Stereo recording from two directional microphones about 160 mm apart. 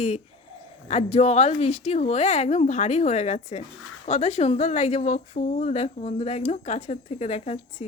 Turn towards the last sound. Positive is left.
turn(degrees=45)  # may be behind; listen again after turning